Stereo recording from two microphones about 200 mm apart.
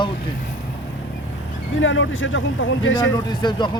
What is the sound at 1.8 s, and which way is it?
Speech, 70° left (ahead or behind).